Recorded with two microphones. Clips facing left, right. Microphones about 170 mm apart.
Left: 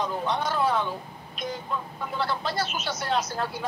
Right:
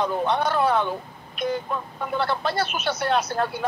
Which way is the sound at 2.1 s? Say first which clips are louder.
Right 4 dB; 60° right (ahead or behind).